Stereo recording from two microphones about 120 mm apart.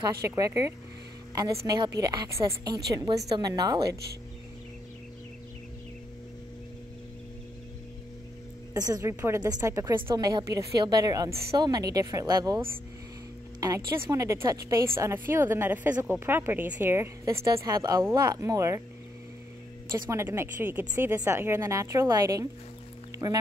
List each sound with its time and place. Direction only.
0.0 s a woman's voice: 30° right (ahead or behind)
1.3 s a woman's voice: 25° right (ahead or behind)
8.7 s a woman's voice: 30° right (ahead or behind)
9.0 s a woman's voice: 20° right (ahead or behind)
13.6 s a woman's voice: 25° right (ahead or behind)
20.1 s a woman's voice: 20° right (ahead or behind)